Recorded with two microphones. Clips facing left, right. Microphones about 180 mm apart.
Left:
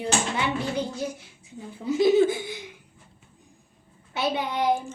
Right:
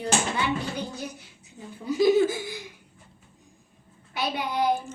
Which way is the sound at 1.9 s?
25° left (ahead or behind).